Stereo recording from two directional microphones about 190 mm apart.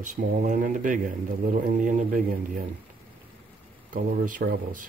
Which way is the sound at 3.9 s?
45° right (ahead or behind).